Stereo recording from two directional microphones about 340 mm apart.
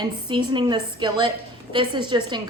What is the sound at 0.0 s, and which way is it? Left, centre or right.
A woman's voice, centre.